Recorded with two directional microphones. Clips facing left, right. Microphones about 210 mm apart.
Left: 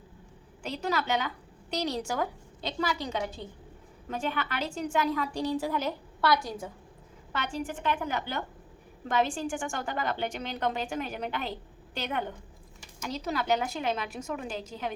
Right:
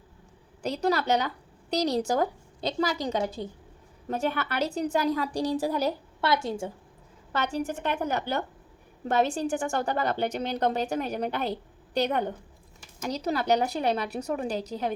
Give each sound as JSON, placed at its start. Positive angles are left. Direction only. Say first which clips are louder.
{"t": 0.6, "sound": "a woman's voice", "louder": "right 5 dB", "side_deg": -40}
{"t": 6.2, "sound": "a woman's voice", "louder": "right 1 dB", "side_deg": -25}
{"t": 7.3, "sound": "a woman's voice", "louder": "right 5 dB", "side_deg": -40}